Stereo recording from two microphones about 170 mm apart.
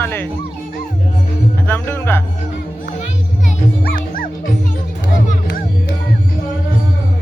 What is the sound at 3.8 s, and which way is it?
Music, 55° left (ahead or behind).